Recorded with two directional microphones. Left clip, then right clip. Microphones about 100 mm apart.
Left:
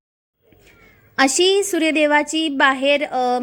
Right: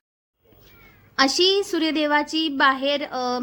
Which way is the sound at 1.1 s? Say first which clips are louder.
Left 3 dB; 45° left (ahead or behind).